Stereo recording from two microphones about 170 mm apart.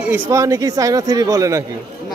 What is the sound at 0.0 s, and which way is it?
Speech, 15° right (ahead or behind).